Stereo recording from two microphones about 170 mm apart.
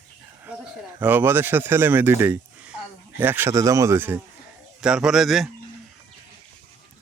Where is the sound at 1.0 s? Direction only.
10° right (ahead or behind).